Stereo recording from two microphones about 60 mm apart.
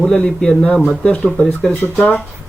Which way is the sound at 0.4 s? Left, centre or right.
Centre.